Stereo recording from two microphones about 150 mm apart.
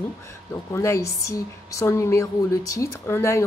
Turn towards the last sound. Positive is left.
turn(degrees=15)  # may be behind; listen again after turning